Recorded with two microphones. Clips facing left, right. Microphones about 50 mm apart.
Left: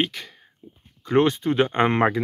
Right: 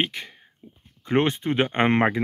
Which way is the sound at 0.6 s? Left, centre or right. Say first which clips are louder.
Left 2 dB; right.